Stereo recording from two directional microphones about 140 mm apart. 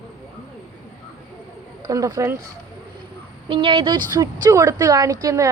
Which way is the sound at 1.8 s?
25° right (ahead or behind).